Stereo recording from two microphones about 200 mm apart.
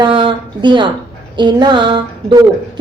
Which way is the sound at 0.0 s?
25° right (ahead or behind).